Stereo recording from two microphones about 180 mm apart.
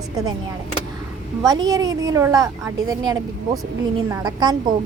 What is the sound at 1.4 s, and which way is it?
A woman's voice, 20° right (ahead or behind).